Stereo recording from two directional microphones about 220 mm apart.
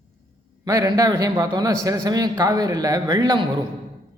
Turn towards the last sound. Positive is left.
turn(degrees=-20)  # may be behind; listen again after turning